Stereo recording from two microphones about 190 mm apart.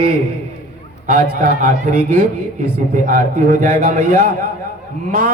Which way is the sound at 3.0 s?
45° right (ahead or behind).